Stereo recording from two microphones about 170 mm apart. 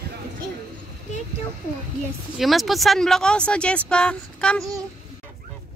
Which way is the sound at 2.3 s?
Centre (ahead or behind).